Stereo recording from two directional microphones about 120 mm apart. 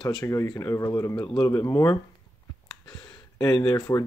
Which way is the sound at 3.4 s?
35° left (ahead or behind).